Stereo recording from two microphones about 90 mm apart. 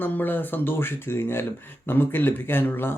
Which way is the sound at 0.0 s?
20° left (ahead or behind).